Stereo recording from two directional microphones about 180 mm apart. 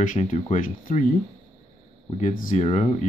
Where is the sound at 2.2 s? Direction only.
45° left (ahead or behind).